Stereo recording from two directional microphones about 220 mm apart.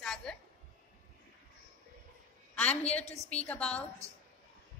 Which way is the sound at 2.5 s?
5° left (ahead or behind).